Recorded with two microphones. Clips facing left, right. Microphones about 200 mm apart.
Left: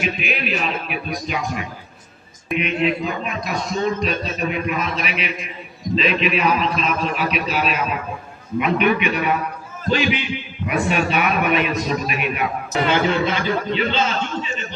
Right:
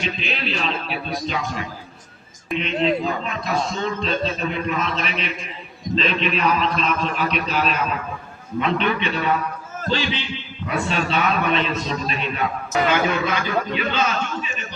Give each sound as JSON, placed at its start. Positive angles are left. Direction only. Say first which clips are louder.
{"t": 0.3, "sound": "a man's voice", "louder": "left 2 dB", "side_deg": 10}
{"t": 2.6, "sound": "a man's voice", "louder": "even", "side_deg": 10}
{"t": 12.7, "sound": "a man's voice", "louder": "left 1 dB", "side_deg": 30}